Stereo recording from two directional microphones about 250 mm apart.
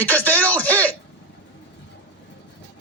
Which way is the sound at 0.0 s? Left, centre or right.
Centre.